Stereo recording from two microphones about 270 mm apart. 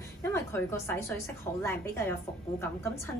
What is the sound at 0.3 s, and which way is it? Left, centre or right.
A woman's voice, centre.